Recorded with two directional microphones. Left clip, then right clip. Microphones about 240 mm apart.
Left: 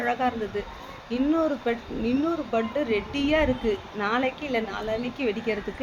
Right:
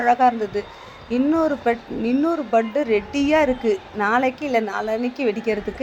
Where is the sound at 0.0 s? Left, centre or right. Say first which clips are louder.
Right 9 dB; right.